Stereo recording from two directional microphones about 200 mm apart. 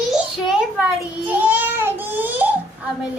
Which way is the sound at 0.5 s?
10° right (ahead or behind).